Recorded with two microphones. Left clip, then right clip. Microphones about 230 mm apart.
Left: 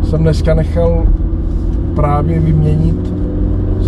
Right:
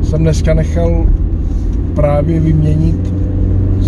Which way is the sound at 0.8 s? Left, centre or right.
Right.